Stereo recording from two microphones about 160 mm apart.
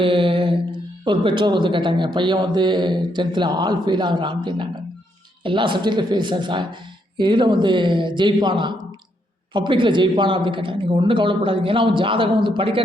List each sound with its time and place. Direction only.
0.0 s speech: 35° right (ahead or behind)